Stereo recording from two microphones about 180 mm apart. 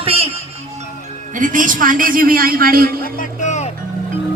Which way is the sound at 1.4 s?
45° right (ahead or behind).